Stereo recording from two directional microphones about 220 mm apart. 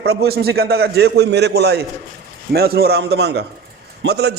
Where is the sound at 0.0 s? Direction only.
45° right (ahead or behind).